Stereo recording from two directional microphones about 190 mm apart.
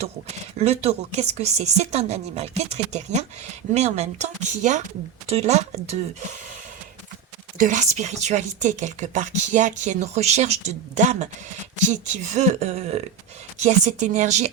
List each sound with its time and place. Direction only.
0.0 s speech: 35° right (ahead or behind)
7.6 s speech: 40° right (ahead or behind)